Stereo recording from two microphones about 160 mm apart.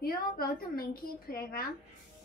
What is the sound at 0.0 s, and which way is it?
A woman's voice, 70° left (ahead or behind).